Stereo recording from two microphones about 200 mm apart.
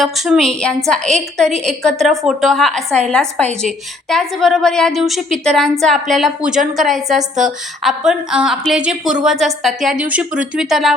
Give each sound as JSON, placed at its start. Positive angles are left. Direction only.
{"t": 0.0, "sound": "a woman's voice", "side_deg": 0}